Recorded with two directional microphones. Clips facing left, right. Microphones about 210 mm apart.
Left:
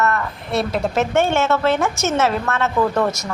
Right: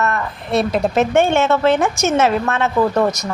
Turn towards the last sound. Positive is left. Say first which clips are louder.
# right 2 dB
turn(degrees=-15)  # may be behind; listen again after turning